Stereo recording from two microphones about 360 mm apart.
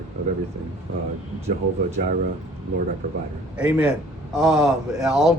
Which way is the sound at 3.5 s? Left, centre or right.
Centre.